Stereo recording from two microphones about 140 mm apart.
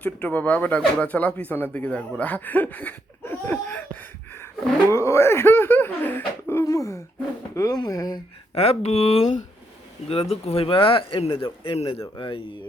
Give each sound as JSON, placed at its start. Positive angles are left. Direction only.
{"t": 0.0, "sound": "speech", "side_deg": 10}
{"t": 4.9, "sound": "speech", "side_deg": 20}
{"t": 8.5, "sound": "a man's voice", "side_deg": 50}